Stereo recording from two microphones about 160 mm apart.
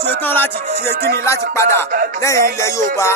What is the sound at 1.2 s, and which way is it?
Speech, 15° left (ahead or behind).